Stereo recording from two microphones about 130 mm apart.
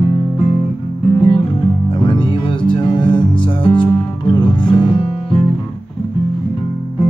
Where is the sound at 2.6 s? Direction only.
40° left (ahead or behind).